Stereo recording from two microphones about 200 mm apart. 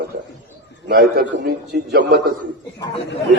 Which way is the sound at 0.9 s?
50° right (ahead or behind).